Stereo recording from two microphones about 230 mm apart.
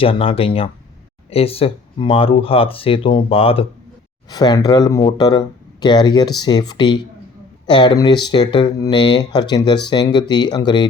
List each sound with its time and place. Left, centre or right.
0.0 s speech: left